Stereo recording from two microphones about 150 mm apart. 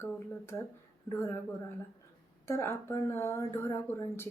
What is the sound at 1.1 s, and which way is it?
Speech, 20° left (ahead or behind).